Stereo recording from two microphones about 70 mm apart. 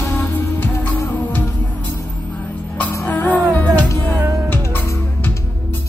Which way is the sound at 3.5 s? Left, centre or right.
Left.